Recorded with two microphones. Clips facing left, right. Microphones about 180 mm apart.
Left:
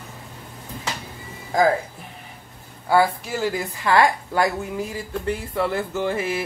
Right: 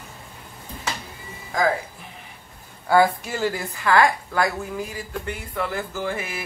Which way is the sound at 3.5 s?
25° left (ahead or behind).